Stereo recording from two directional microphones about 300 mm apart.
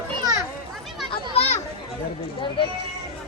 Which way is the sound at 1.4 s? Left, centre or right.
Left.